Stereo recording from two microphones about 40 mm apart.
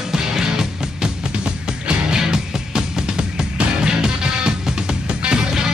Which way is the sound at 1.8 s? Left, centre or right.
Centre.